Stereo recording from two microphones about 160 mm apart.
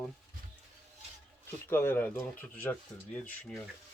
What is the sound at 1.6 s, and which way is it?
Speech, 15° left (ahead or behind).